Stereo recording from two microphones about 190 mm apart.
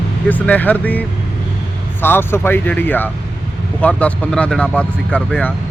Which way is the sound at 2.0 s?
10° left (ahead or behind).